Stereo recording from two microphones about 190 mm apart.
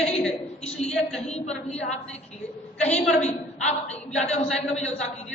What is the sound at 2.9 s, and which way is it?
Speech, 5° left (ahead or behind).